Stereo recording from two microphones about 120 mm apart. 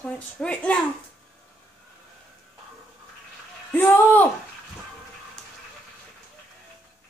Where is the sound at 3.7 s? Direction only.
15° left (ahead or behind).